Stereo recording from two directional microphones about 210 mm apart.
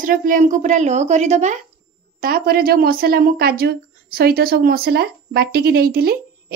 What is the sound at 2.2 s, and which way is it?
Speech, 45° right (ahead or behind).